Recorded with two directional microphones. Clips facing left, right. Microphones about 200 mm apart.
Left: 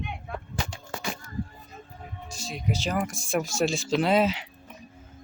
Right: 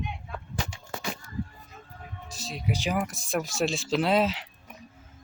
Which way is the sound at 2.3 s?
Centre (ahead or behind).